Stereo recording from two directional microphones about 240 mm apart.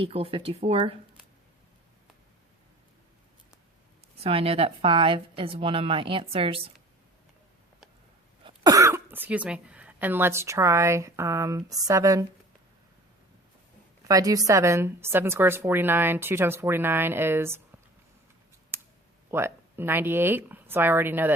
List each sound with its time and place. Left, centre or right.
0.0 s a woman's voice: right
4.2 s a woman's voice: right
8.4 s a woman's voice: centre
14.1 s a woman's voice: centre
18.7 s a sound: centre
19.3 s a woman's voice: centre